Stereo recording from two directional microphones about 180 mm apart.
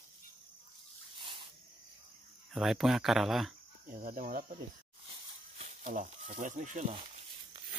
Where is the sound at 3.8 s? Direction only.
50° right (ahead or behind).